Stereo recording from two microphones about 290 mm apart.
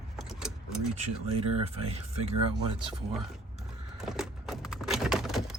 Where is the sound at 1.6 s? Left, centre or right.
Right.